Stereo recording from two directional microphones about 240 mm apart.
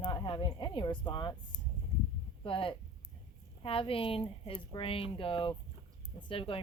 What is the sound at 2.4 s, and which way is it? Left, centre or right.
Speech, left.